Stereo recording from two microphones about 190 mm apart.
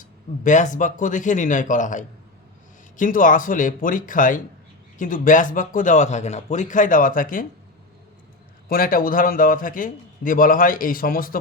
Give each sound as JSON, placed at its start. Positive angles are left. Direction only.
{"t": 0.0, "sound": "a man's voice", "side_deg": 40}
{"t": 8.7, "sound": "a man's voice", "side_deg": 50}